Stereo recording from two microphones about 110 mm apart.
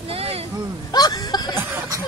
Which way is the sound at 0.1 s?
65° right (ahead or behind).